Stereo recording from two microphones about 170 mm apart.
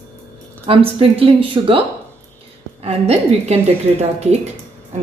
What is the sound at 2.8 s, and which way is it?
Speech, 35° right (ahead or behind).